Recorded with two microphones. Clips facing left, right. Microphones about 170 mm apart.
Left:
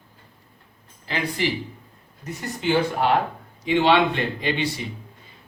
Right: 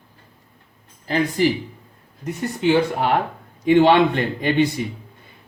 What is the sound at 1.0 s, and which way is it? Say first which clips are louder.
Speech: right 7 dB; 45° right (ahead or behind).